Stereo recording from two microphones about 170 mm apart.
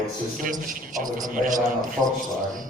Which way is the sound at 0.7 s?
50° right (ahead or behind).